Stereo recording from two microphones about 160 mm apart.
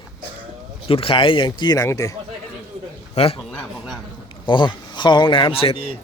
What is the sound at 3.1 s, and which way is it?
Speech, 35° left (ahead or behind).